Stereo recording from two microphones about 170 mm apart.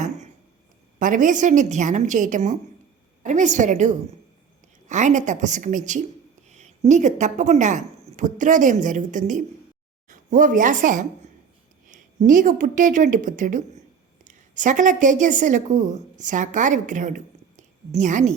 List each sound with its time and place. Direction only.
0.9 s a woman's voice: 50° right (ahead or behind)